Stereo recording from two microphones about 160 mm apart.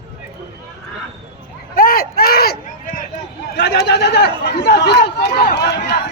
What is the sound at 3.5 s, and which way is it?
Chatter, 90° left.